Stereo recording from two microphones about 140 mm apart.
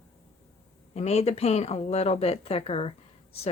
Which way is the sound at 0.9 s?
50° left (ahead or behind).